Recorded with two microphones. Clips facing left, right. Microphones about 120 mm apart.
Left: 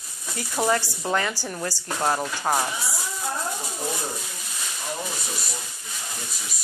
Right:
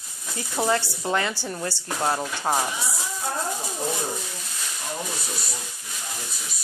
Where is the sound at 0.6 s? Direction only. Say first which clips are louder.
Left 1 dB; 15° left (ahead or behind).